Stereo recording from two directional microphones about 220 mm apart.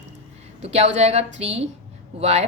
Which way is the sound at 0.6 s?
30° right (ahead or behind).